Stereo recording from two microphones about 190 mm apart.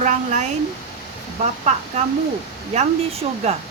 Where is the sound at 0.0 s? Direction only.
40° right (ahead or behind).